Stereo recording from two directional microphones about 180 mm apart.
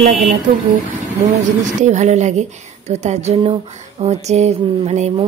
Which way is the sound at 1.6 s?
40° right (ahead or behind).